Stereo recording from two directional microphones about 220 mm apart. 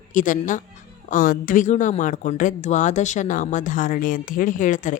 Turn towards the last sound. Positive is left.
turn(degrees=35)  # may be behind; listen again after turning